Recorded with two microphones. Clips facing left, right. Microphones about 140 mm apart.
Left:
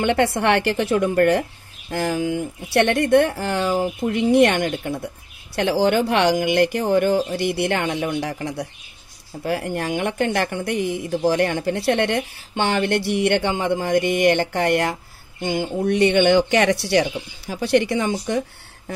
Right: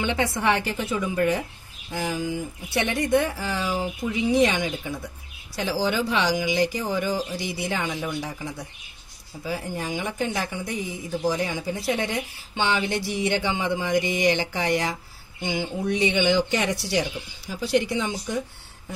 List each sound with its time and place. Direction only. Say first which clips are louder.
0.0 s a woman's voice: left 5 dB; 60° left (ahead or behind)